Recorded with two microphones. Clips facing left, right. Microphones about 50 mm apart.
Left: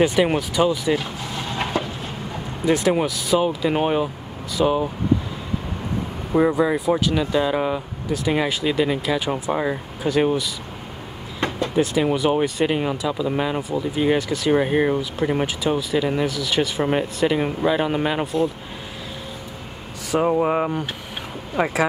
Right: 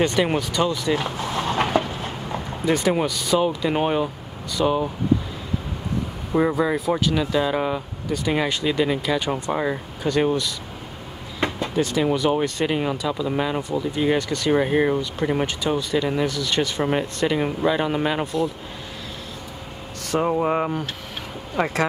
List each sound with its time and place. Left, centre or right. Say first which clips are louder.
0.0 s speech: left 2 dB; centre
1.5 s a sound: right 4 dB; right
2.6 s speech: left 2 dB; centre
6.3 s speech: left 2 dB; centre
11.3 s vehicle: left 1 dB; centre
11.7 s speech: left 2 dB; centre
20.1 s speech: left 2 dB; centre